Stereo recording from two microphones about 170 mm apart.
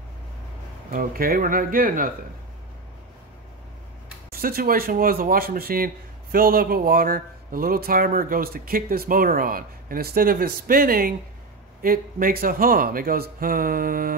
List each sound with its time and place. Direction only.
0.9 s speech: 60° right (ahead or behind)
4.3 s speech: 60° right (ahead or behind)